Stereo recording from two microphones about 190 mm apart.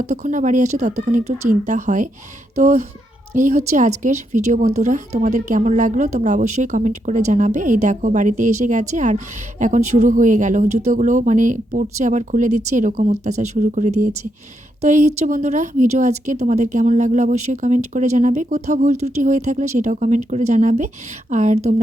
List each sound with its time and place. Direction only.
0.0 s speech: 40° right (ahead or behind)